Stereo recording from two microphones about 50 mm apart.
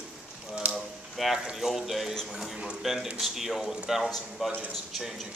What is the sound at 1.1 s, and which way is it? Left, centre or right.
Speech, centre.